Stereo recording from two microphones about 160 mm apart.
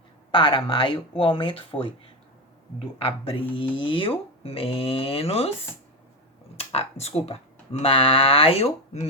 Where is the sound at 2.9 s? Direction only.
35° left (ahead or behind).